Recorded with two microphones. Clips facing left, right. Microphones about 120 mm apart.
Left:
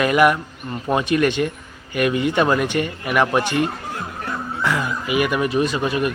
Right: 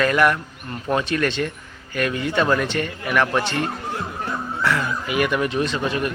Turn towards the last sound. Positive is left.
turn(degrees=10)  # may be behind; listen again after turning